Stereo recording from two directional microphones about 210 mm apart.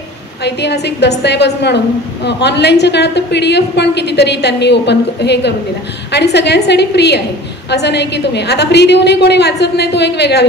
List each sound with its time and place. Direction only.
0.4 s a woman's voice: 55° left (ahead or behind)